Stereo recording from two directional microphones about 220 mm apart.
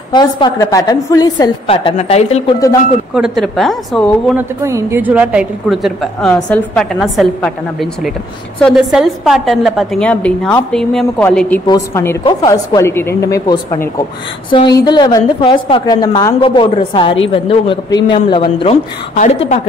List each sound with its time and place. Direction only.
0.1 s a woman's voice: 20° left (ahead or behind)
3.2 s a woman's voice: centre (ahead or behind)
4.4 s a woman's voice: 10° right (ahead or behind); by 19.6 s 30° left (ahead or behind)